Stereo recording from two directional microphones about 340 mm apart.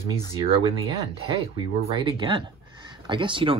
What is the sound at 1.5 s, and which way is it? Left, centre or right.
Speech, centre.